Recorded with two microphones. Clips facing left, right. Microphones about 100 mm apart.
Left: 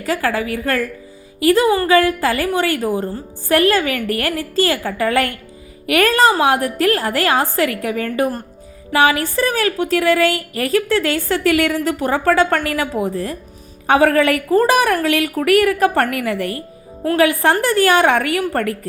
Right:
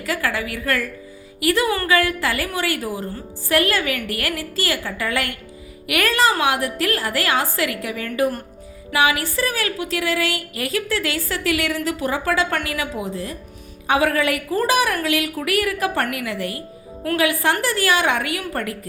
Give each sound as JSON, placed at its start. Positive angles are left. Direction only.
{"t": 0.0, "sound": "a woman's voice", "side_deg": 35}
{"t": 17.2, "sound": "a woman's voice", "side_deg": 45}